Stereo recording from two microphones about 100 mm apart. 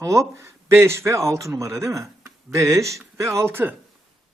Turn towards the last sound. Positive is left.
turn(degrees=-25)  # may be behind; listen again after turning